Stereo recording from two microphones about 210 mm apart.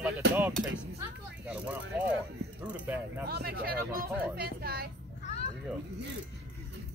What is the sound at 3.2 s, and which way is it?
Speech, 45° right (ahead or behind).